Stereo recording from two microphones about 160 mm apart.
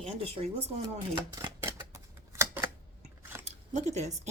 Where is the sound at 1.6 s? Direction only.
15° right (ahead or behind).